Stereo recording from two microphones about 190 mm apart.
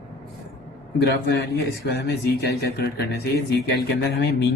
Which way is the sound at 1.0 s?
60° left (ahead or behind).